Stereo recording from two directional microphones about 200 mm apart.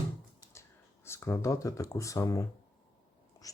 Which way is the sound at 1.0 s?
15° left (ahead or behind).